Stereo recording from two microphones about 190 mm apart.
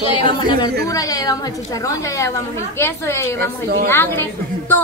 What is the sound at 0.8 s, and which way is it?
A woman's voice, 20° left (ahead or behind).